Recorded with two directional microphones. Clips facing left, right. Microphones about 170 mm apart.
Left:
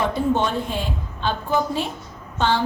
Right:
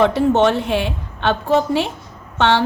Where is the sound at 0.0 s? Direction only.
75° right (ahead or behind).